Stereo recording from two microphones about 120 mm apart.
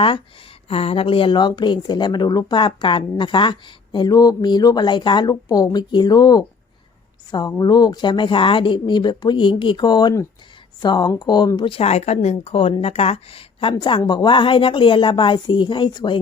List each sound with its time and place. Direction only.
0.0 s a woman's voice: 50° left (ahead or behind)
5.3 s a woman's voice: 30° left (ahead or behind)
11.8 s speech: 65° left (ahead or behind)
13.7 s a woman's voice: 40° left (ahead or behind)